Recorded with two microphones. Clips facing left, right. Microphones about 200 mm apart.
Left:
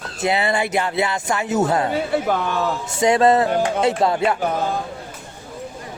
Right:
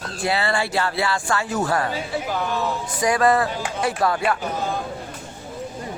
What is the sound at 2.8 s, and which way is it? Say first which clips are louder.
Speech: left 4 dB; 25° left (ahead or behind).